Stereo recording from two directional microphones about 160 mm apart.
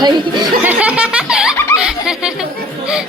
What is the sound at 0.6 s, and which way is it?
Giggle, 5° right (ahead or behind).